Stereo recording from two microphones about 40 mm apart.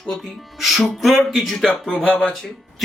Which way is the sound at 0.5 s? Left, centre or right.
Centre.